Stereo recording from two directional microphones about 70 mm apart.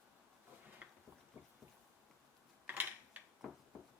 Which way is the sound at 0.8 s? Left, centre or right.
Right.